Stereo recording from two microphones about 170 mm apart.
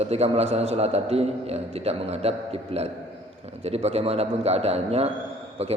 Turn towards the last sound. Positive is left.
turn(degrees=-35)  # may be behind; listen again after turning